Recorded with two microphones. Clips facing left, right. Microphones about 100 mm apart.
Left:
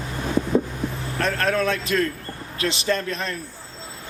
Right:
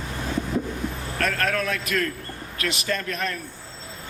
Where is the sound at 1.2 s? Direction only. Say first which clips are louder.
Left 3 dB; 30° left (ahead or behind).